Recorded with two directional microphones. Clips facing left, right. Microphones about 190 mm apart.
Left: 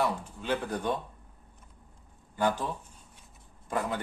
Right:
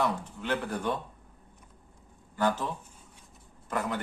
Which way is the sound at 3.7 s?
15° left (ahead or behind).